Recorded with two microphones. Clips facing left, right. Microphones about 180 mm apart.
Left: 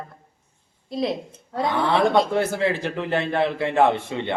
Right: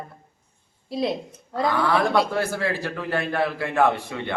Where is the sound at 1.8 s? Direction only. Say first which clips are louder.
Left 4 dB; 25° left (ahead or behind).